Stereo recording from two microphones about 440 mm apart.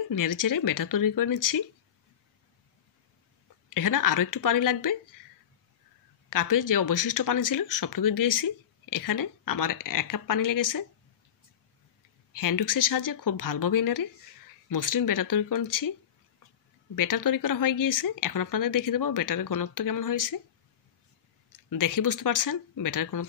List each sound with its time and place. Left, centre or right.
0.1 s speech: left
3.7 s speech: left
6.3 s speech: left
12.3 s speech: left
16.9 s speech: left
21.6 s speech: left